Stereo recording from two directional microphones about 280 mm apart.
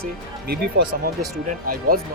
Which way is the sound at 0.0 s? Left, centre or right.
Right.